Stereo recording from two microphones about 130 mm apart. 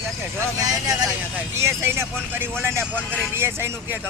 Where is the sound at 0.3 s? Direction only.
25° right (ahead or behind).